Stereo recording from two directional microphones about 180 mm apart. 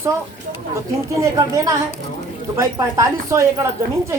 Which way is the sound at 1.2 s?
20° right (ahead or behind).